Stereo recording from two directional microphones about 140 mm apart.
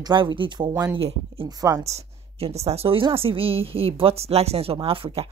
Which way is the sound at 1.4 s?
25° right (ahead or behind).